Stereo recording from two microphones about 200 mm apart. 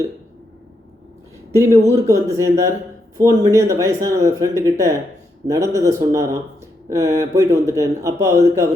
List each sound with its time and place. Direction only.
1.5 s speech: 15° right (ahead or behind)